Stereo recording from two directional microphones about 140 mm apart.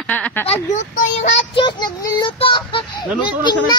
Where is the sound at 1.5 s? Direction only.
35° left (ahead or behind).